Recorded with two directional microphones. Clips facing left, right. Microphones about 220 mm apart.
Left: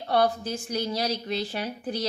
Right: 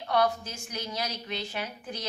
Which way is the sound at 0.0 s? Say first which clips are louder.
Left 3 dB; 35° left (ahead or behind).